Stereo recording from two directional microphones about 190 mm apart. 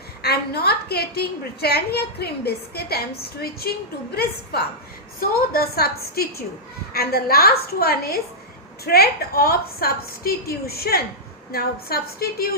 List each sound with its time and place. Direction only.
0.2 s a woman's voice: 55° left (ahead or behind)